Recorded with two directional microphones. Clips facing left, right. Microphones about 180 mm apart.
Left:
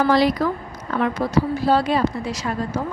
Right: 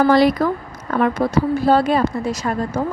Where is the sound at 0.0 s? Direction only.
55° right (ahead or behind).